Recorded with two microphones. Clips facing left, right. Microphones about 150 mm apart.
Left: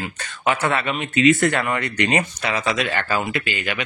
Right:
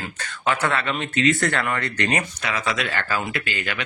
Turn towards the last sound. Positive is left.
turn(degrees=15)  # may be behind; listen again after turning